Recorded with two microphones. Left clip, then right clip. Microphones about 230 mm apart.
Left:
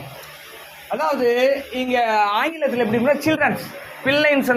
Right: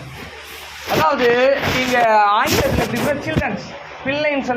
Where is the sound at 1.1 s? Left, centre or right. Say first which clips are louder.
Right 2 dB; centre.